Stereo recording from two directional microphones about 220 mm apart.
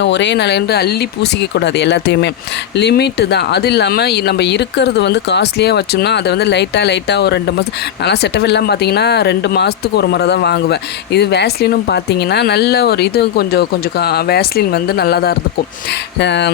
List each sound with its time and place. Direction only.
0.0 s speech: 55° left (ahead or behind)